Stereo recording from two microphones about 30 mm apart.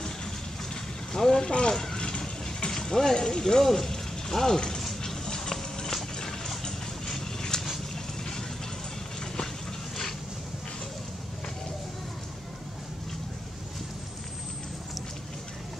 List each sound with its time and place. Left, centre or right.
1.1 s speech: centre
1.4 s speech: left
1.7 s speech: centre
2.0 s vehicle: left
2.7 s a sound: centre
3.2 s speech: left
4.8 s clip-clop: centre
6.1 s a sound: left